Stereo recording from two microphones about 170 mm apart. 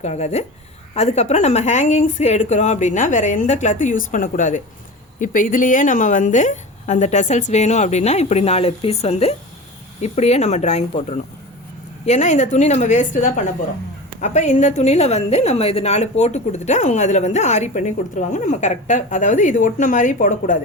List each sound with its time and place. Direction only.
0.0 s a woman's voice: 40° left (ahead or behind)